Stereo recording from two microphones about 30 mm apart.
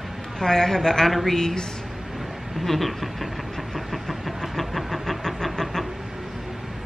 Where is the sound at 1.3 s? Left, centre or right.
Centre.